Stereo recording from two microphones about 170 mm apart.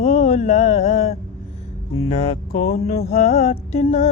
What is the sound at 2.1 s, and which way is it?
Music, 40° left (ahead or behind).